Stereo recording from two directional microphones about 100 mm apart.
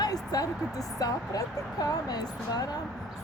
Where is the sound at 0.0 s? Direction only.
40° left (ahead or behind).